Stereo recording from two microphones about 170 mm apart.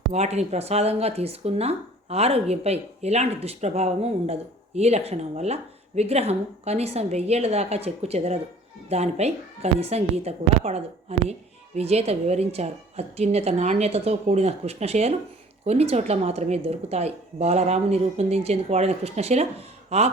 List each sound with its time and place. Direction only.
0.1 s speech: 40° right (ahead or behind)